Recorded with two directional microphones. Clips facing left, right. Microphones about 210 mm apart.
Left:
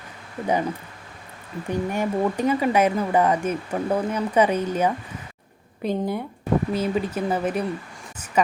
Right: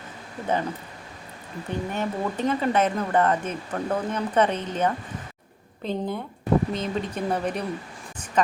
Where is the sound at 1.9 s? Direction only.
10° left (ahead or behind).